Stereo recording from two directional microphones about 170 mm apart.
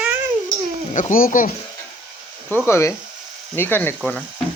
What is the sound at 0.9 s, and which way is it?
Speech, 50° left (ahead or behind).